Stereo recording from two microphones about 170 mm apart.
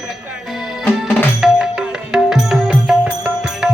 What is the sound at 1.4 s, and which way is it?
Music, 5° right (ahead or behind).